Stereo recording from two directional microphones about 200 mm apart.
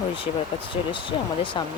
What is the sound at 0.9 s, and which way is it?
Speech, 25° left (ahead or behind).